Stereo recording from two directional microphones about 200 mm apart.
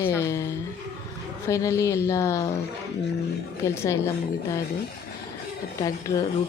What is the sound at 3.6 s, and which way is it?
Speech, 15° left (ahead or behind).